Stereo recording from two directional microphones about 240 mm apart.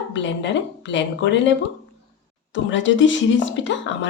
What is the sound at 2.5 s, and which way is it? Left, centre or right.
A woman's voice, left.